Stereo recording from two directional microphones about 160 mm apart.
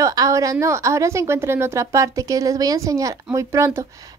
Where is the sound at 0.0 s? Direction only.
20° right (ahead or behind).